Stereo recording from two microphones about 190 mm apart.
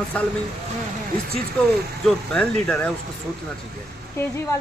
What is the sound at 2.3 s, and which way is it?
Speech, 5° left (ahead or behind).